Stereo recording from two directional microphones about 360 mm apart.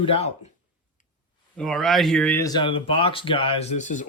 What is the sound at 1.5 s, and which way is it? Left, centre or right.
Speech, centre.